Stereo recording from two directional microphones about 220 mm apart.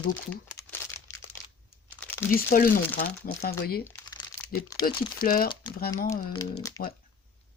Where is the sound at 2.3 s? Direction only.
40° left (ahead or behind).